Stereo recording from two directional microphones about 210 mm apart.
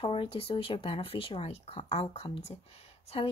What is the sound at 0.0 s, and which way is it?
Speech, 25° left (ahead or behind).